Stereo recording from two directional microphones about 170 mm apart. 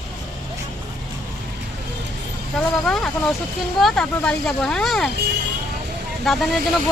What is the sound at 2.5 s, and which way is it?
Speech, centre (ahead or behind).